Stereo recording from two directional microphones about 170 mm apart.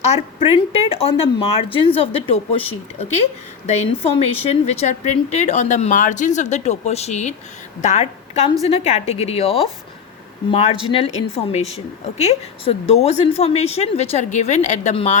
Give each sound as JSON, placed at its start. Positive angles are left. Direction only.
{"t": 0.0, "sound": "a woman's voice", "side_deg": 35}